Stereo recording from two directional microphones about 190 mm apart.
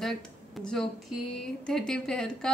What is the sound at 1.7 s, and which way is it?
Speech, centre (ahead or behind).